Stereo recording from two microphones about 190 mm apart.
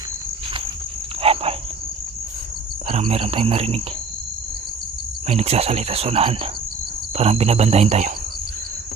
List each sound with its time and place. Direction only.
1.2 s insect: 30° right (ahead or behind)
2.9 s cricket: 35° right (ahead or behind)
5.3 s cricket: 35° right (ahead or behind)